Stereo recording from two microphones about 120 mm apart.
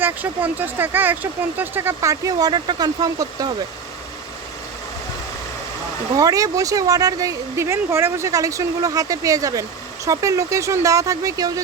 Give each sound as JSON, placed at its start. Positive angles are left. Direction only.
{"t": 0.0, "sound": "speech", "side_deg": -15}
{"t": 6.1, "sound": "speech", "side_deg": -30}